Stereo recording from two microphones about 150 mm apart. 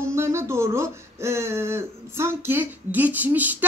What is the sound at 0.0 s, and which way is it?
Speech, 20° right (ahead or behind).